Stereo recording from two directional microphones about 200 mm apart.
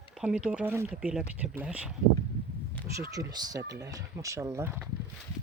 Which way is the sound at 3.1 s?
20° right (ahead or behind).